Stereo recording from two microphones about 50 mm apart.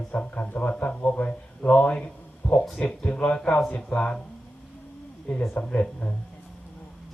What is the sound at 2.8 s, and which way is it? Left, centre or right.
Speech, left.